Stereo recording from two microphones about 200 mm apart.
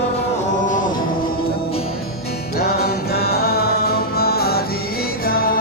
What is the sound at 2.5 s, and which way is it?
Music, 50° left (ahead or behind).